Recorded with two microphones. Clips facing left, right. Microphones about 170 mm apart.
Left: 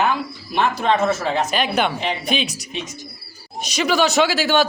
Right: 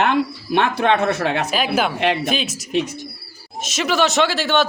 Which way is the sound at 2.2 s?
Centre (ahead or behind).